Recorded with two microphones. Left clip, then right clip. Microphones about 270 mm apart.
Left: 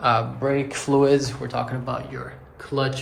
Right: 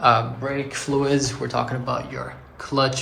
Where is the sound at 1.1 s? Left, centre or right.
Centre.